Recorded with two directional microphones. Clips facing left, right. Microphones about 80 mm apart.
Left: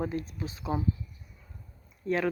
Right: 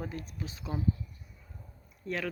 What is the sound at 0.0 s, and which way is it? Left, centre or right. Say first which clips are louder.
Speech: left 6 dB; left.